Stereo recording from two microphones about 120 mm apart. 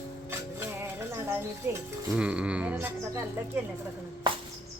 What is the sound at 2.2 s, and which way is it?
Music, 10° right (ahead or behind).